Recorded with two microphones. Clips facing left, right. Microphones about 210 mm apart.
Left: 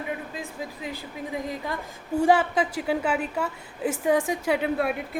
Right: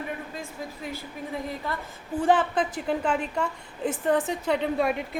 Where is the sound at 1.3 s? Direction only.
15° left (ahead or behind).